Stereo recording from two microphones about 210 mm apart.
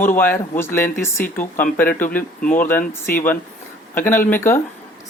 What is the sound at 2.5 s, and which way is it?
Speech, 10° left (ahead or behind).